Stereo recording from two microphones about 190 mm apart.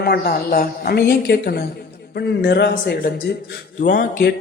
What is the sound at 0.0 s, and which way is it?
Speech, 55° left (ahead or behind).